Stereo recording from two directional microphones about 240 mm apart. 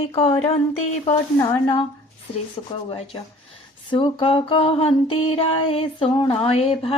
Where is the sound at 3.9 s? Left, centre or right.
Left.